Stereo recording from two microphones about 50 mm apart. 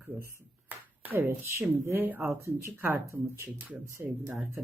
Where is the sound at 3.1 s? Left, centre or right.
Right.